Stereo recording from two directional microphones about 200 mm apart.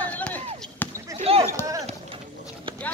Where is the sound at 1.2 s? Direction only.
30° right (ahead or behind).